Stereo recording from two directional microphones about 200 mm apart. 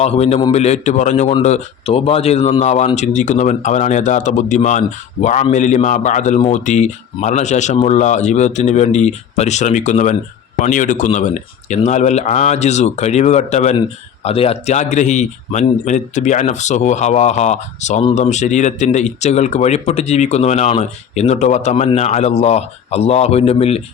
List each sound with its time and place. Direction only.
0.0 s speech: 30° left (ahead or behind)